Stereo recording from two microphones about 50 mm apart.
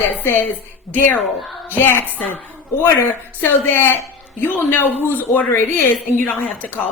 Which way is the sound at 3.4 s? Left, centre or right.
Left.